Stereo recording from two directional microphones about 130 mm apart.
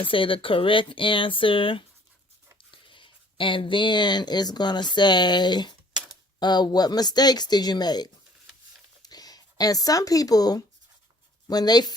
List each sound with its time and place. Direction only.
0.0 s speech: 40° left (ahead or behind)
9.0 s a sound: 30° left (ahead or behind)
11.4 s speech: 30° left (ahead or behind)